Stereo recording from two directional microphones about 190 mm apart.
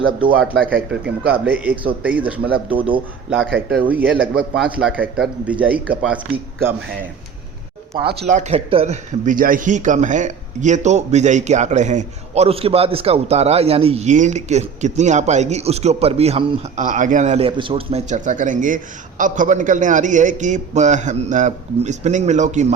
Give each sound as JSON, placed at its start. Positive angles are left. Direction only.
{"t": 0.7, "sound": "speech", "side_deg": -5}
{"t": 8.3, "sound": "speech", "side_deg": -40}